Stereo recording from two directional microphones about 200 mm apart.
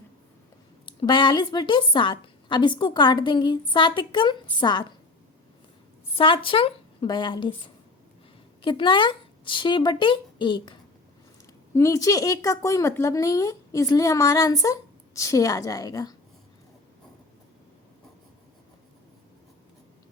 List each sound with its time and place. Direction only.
0.9 s a woman's voice: 25° left (ahead or behind)
6.1 s a woman's voice: 25° left (ahead or behind)